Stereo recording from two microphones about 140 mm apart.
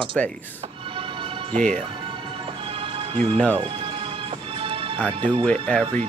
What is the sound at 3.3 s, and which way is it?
Speech, 10° left (ahead or behind).